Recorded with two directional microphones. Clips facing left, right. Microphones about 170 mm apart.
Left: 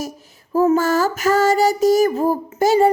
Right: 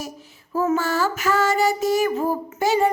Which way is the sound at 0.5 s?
40° left (ahead or behind).